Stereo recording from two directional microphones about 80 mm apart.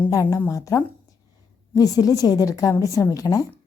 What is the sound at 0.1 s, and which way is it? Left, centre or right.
A woman's voice, left.